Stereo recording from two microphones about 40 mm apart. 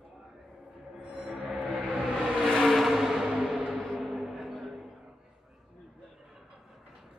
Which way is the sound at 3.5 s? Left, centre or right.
Right.